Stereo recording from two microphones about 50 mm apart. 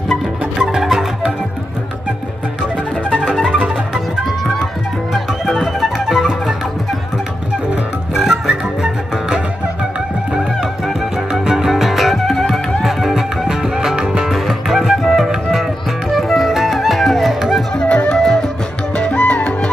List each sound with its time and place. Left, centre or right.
0.6 s music: centre
3.3 s music: centre
5.1 s music: centre
8.1 s music: centre
10.6 s music: centre
15.0 s flute: centre
15.5 s music: centre
17.7 s music: left
18.0 s music: centre
18.9 s music: left